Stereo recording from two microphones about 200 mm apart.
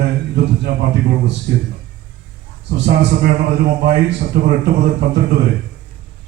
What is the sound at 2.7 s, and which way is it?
A man's voice, 45° right (ahead or behind).